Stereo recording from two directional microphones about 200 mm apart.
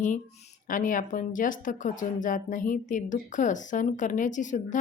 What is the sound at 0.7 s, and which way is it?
A woman's voice, 40° left (ahead or behind).